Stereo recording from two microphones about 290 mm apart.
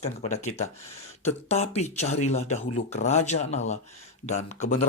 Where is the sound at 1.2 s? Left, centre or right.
Left.